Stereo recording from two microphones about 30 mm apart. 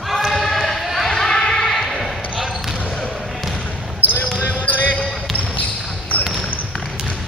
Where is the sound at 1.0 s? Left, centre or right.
Centre.